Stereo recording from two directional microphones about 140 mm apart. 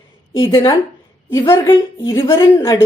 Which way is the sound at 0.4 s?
35° left (ahead or behind).